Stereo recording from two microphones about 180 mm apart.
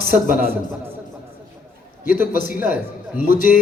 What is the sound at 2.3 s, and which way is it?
A man's voice, 50° left (ahead or behind).